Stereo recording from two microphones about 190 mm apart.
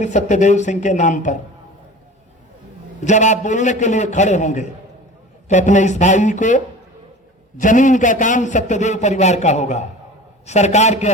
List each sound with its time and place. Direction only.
0.0 s a man's voice: 40° left (ahead or behind)
3.0 s a man's voice: 40° left (ahead or behind)